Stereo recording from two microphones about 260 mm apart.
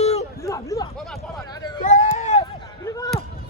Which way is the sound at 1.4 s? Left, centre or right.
Centre.